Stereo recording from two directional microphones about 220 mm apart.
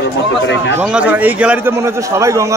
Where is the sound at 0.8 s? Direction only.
5° right (ahead or behind).